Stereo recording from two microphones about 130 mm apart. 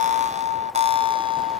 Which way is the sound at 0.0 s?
65° right (ahead or behind).